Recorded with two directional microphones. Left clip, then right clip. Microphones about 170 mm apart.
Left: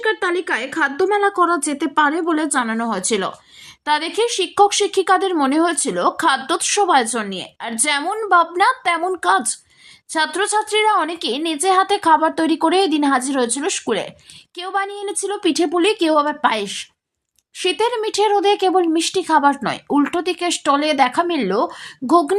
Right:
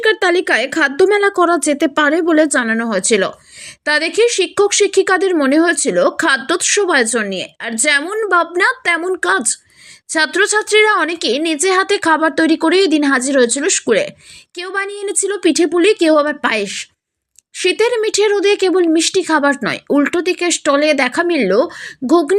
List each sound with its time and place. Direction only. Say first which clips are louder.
0.0 s a woman's voice: right 6 dB; 30° right (ahead or behind); by 22.4 s 5° right (ahead or behind)